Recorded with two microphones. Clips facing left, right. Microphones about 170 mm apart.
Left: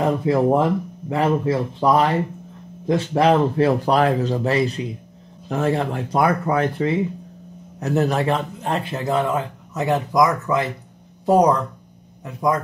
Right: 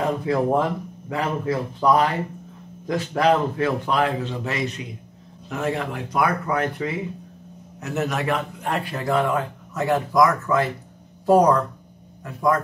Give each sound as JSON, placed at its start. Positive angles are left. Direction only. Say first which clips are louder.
{"t": 0.2, "sound": "a man's voice", "louder": "left 3 dB", "side_deg": 25}